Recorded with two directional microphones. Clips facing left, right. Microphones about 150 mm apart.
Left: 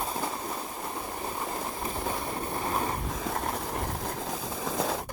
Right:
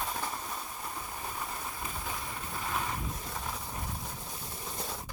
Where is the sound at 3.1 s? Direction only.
85° left.